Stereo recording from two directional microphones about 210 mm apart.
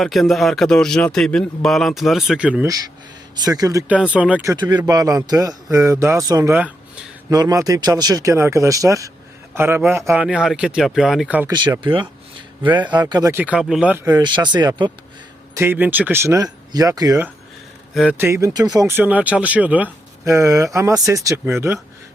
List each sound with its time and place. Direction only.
0.0 s a man's voice: centre (ahead or behind)
11.5 s speech: 20° right (ahead or behind)
14.1 s speech: 20° right (ahead or behind)
17.9 s speech: 5° right (ahead or behind)